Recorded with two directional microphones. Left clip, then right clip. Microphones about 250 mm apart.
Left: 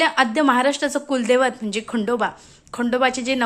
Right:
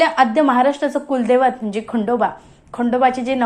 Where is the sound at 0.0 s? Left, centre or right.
Left.